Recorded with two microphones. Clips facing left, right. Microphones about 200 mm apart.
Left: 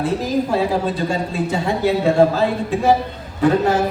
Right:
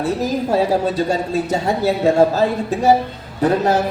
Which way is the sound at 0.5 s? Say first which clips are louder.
Right 2 dB; 40° right (ahead or behind).